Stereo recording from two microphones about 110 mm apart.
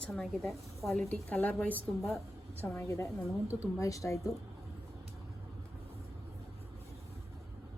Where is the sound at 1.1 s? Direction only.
15° left (ahead or behind).